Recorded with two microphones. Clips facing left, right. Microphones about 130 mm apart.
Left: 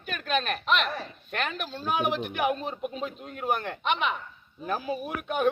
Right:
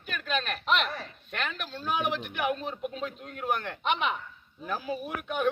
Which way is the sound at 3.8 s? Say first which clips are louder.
Even; centre (ahead or behind).